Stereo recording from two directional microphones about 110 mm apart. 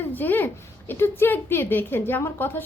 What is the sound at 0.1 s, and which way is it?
A woman's voice, 15° left (ahead or behind).